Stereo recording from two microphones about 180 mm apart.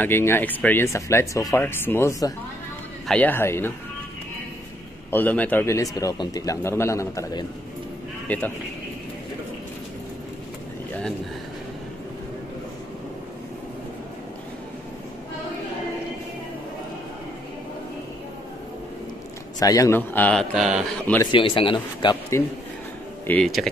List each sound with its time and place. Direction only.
0.0 s a man's voice: 15° left (ahead or behind)
5.1 s a man's voice: 10° left (ahead or behind)
19.6 s a man's voice: 20° left (ahead or behind); by 21.2 s centre (ahead or behind)
21.3 s speech: 30° left (ahead or behind)
23.2 s speech: 5° left (ahead or behind)